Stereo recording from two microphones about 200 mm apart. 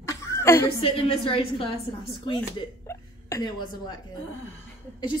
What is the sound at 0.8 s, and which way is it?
Speech, 25° left (ahead or behind).